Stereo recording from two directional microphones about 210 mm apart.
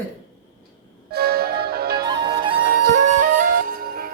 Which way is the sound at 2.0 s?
25° right (ahead or behind).